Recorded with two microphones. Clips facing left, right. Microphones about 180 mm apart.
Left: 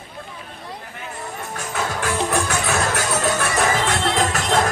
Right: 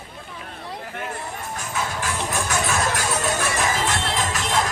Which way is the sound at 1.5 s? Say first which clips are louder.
Left 3 dB; 60° left (ahead or behind).